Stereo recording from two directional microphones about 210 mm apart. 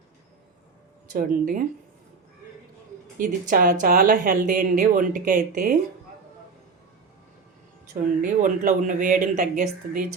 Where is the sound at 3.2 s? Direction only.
40° right (ahead or behind).